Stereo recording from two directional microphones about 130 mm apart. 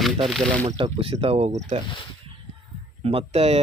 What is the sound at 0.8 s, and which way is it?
Speech, 45° right (ahead or behind).